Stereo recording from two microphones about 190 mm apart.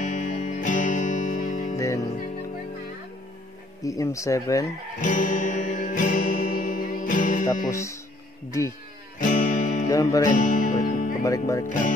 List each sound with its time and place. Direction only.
0.0 s music: 40° left (ahead or behind)
1.8 s music: 15° left (ahead or behind)
3.8 s speech: 15° left (ahead or behind)
5.0 s music: 45° left (ahead or behind)
7.7 s speech: 15° left (ahead or behind)
9.2 s music: 45° left (ahead or behind)
9.8 s speech: 20° left (ahead or behind)
10.3 s music: 45° left (ahead or behind)
11.2 s speech: 15° left (ahead or behind)
11.6 s speech: 40° left (ahead or behind)